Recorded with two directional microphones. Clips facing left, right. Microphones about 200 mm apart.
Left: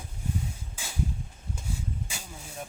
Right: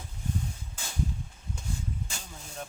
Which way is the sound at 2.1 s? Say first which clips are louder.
Left 1 dB; 5° left (ahead or behind).